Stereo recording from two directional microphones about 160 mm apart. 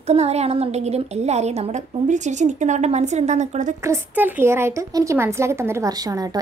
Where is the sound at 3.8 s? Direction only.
15° right (ahead or behind).